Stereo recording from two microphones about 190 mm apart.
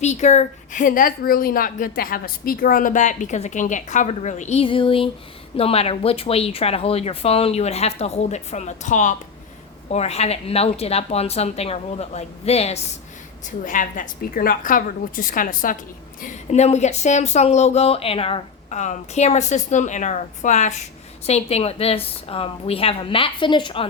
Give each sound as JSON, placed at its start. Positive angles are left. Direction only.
{"t": 0.0, "sound": "a woman's voice", "side_deg": 35}